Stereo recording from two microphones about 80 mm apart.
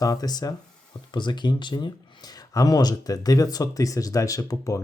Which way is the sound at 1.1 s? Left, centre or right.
Left.